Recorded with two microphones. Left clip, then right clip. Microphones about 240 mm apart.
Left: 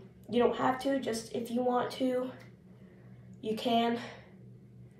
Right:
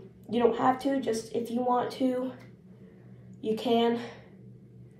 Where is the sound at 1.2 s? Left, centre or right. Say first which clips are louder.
Right 5 dB; right.